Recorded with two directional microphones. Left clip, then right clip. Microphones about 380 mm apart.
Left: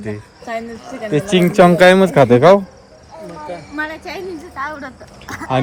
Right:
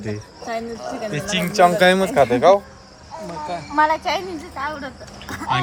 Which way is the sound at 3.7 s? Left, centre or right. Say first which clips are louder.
Right 9 dB; centre.